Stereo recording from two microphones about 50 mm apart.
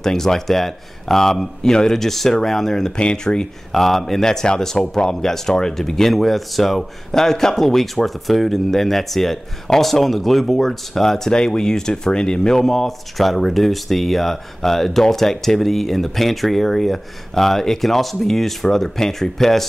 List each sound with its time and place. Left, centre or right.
0.0 s speech: centre
3.0 s speech: centre
3.7 s speech: centre
12.6 s speech: centre